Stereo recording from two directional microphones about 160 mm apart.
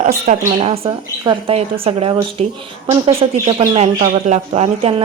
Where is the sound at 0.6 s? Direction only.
35° right (ahead or behind).